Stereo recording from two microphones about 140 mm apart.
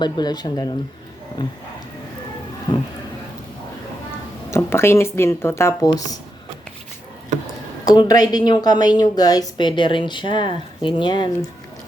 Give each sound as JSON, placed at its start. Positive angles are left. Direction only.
{"t": 0.0, "sound": "speech", "side_deg": 30}
{"t": 2.7, "sound": "a woman's voice", "side_deg": 30}
{"t": 4.5, "sound": "speech", "side_deg": 15}
{"t": 7.9, "sound": "a woman's voice", "side_deg": 25}